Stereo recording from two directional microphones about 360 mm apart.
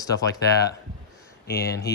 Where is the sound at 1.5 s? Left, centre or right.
Left.